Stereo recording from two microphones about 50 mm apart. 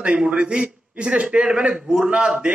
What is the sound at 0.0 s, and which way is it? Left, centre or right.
A man's voice, centre.